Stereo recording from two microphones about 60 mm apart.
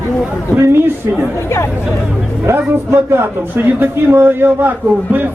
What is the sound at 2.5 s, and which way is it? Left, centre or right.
A man's voice, right.